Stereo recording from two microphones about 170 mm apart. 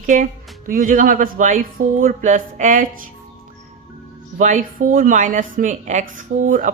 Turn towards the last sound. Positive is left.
turn(degrees=-45)  # may be behind; listen again after turning